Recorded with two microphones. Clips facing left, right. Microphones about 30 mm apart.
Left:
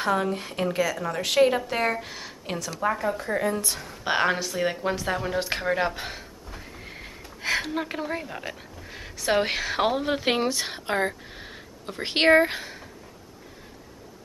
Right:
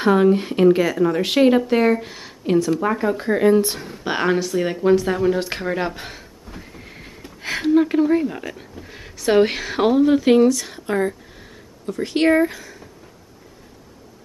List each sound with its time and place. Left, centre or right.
0.0 s speech: centre
1.6 s speech: centre
2.8 s speech: centre
3.2 s speech: right
4.0 s speech: centre
10.0 s speech: left